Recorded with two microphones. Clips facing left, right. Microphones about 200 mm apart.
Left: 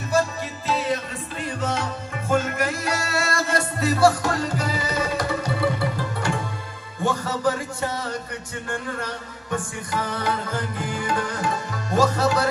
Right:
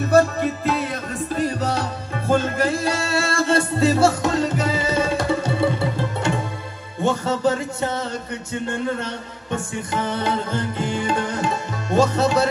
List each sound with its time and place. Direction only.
0.1 s music: 55° right (ahead or behind); by 12.4 s 25° right (ahead or behind)